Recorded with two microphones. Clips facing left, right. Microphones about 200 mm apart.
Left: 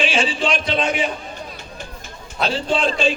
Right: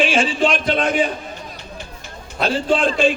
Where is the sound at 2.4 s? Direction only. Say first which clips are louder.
Right 2 dB; 50° right (ahead or behind).